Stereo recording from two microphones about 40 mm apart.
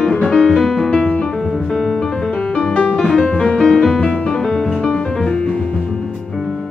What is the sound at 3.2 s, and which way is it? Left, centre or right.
Music, left.